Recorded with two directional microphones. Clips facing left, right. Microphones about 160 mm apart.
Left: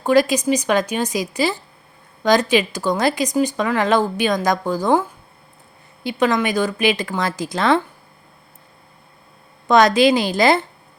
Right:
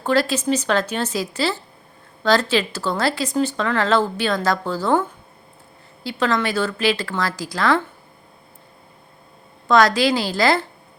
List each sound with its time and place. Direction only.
0.0 s speech: 15° left (ahead or behind)
9.6 s a woman's voice: 20° left (ahead or behind)